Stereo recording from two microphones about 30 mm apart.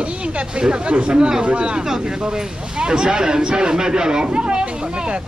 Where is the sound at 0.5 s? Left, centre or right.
Right.